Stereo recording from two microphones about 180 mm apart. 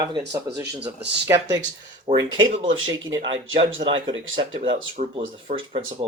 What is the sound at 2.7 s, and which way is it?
Speech, 90° right.